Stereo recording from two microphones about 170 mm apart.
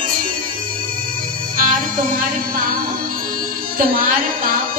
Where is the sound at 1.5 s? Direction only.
55° right (ahead or behind).